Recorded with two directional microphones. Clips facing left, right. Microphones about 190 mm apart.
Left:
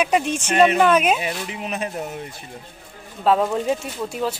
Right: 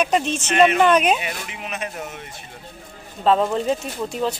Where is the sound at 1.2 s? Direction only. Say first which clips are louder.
Left 4 dB; 35° left (ahead or behind).